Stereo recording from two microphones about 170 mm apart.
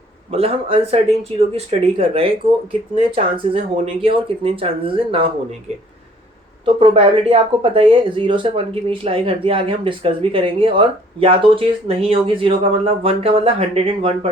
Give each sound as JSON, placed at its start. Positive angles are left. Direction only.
{"t": 0.3, "sound": "speech", "side_deg": -35}
{"t": 6.7, "sound": "speech", "side_deg": -35}